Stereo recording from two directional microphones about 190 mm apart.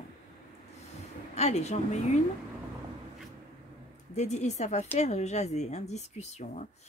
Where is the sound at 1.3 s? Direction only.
35° left (ahead or behind).